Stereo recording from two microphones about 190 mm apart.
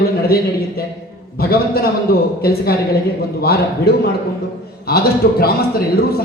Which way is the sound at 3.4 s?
55° left (ahead or behind).